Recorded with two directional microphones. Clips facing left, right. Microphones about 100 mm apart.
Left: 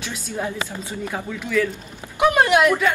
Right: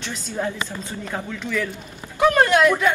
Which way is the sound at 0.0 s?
10° left (ahead or behind).